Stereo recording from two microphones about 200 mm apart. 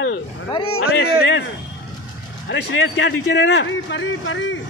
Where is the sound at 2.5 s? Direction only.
65° left (ahead or behind).